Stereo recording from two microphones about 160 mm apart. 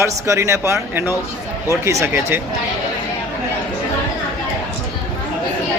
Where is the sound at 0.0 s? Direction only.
15° right (ahead or behind).